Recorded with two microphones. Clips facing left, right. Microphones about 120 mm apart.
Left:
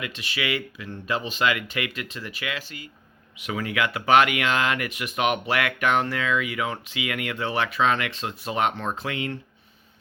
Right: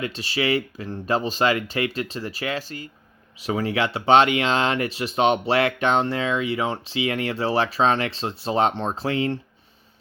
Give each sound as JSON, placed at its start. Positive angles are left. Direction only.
{"t": 0.0, "sound": "speech", "side_deg": -35}